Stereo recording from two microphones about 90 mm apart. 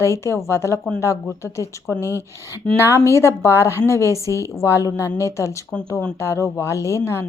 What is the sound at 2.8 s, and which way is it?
A woman's voice, 35° left (ahead or behind).